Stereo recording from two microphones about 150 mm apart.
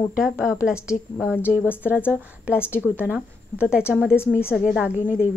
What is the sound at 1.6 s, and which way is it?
Speech, 15° left (ahead or behind).